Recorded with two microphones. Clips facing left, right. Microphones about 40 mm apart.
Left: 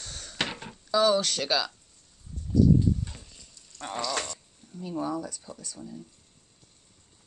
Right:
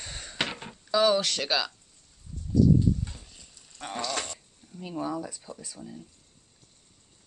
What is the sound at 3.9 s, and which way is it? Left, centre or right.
Speech, centre.